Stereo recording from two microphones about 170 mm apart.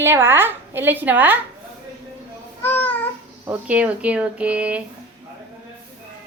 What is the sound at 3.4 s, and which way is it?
A woman's voice, 10° right (ahead or behind).